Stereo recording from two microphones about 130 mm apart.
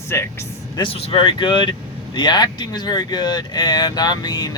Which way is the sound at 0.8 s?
45° left (ahead or behind).